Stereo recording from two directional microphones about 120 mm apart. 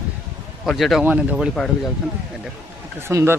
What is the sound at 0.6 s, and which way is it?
Speech, centre (ahead or behind).